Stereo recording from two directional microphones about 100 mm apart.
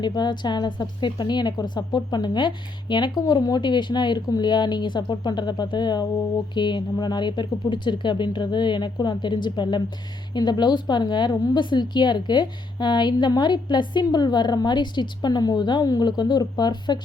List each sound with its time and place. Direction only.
0.0 s a woman's voice: 45° left (ahead or behind)